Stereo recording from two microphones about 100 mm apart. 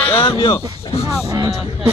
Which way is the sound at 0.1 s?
65° left (ahead or behind).